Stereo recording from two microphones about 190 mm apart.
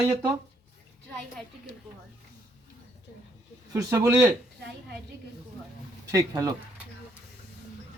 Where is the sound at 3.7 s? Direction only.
15° right (ahead or behind).